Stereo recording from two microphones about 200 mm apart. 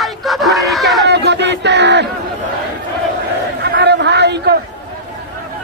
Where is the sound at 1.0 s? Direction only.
55° right (ahead or behind).